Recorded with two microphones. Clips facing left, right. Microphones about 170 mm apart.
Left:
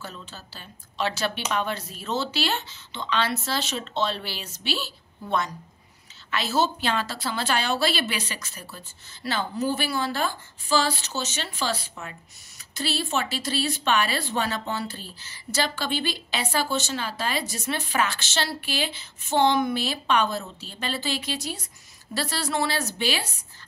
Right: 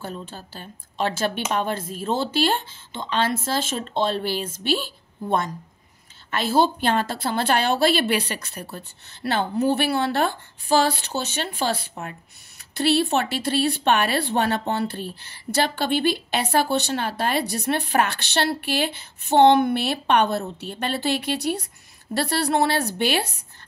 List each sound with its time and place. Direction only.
0.0 s a woman's voice: 50° right (ahead or behind)